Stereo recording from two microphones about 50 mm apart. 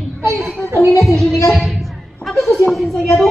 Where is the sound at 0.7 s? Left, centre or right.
Left.